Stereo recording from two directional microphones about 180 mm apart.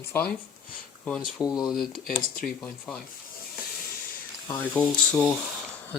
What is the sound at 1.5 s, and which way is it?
Speech, centre (ahead or behind).